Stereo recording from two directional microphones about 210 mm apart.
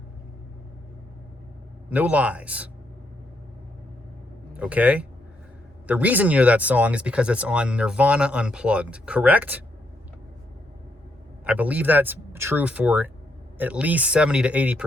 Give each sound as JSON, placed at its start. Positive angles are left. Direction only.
{"t": 1.9, "sound": "speech", "side_deg": -5}
{"t": 4.5, "sound": "speech", "side_deg": -5}
{"t": 11.4, "sound": "speech", "side_deg": -5}